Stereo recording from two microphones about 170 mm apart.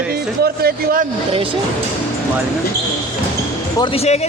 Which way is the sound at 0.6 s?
60° right (ahead or behind).